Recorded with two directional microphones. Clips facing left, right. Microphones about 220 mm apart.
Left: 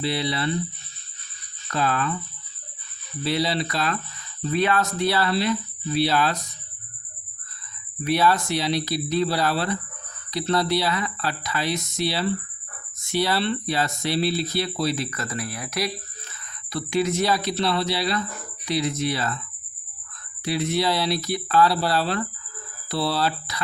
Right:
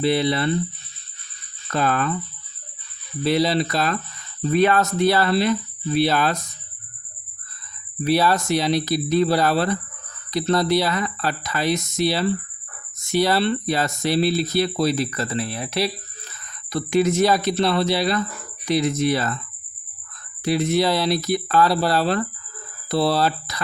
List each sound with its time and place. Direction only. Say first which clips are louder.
0.0 s speech: right 6 dB; 50° right (ahead or behind)
1.7 s speech: right 3 dB; 50° right (ahead or behind)
3.2 s speech: right 5 dB; 45° right (ahead or behind)
8.0 s speech: right 2 dB; 35° right (ahead or behind)
16.7 s speech: right 4 dB; 45° right (ahead or behind)
20.5 s speech: right 4 dB; 45° right (ahead or behind)